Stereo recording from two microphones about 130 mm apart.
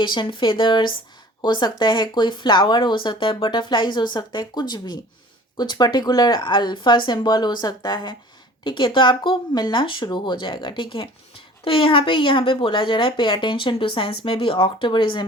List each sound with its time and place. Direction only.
0.0 s speech: 35° left (ahead or behind)